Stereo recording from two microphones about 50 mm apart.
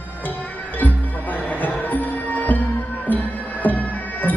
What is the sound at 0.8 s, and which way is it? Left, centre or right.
Music, left.